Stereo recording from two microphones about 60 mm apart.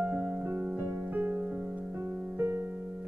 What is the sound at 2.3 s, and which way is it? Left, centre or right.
Music, right.